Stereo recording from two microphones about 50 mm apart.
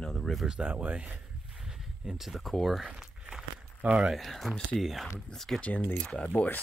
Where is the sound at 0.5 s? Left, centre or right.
Right.